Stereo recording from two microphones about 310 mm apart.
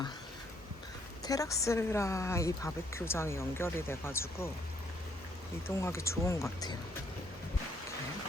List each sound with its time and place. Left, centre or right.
1.2 s a woman's voice: centre
5.6 s a woman's voice: centre